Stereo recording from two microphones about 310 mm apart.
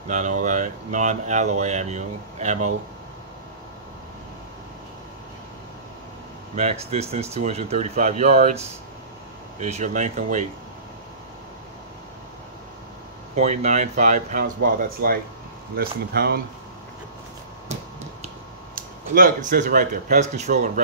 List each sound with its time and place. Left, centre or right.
0.1 s speech: right
6.5 s speech: right
9.6 s speech: right
13.4 s speech: right
18.8 s speech: right